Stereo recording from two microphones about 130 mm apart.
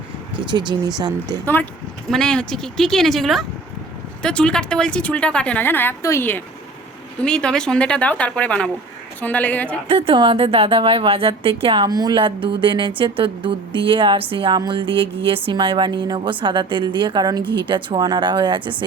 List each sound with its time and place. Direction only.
0.3 s speech: 35° right (ahead or behind)
2.0 s a woman's voice: 5° left (ahead or behind)
7.2 s a woman's voice: 5° left (ahead or behind)
9.9 s a woman's voice: 45° right (ahead or behind)